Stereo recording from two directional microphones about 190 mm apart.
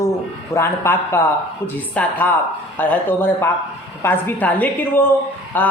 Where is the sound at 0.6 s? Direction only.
15° left (ahead or behind).